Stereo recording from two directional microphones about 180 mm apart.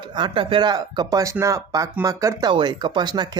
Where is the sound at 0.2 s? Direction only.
25° right (ahead or behind).